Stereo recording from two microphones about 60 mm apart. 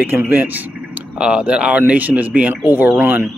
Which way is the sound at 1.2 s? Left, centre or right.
Centre.